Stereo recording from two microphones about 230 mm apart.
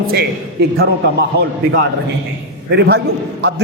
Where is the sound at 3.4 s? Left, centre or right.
Right.